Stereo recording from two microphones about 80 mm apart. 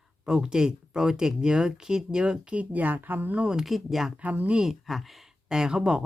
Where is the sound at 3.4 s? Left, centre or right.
Centre.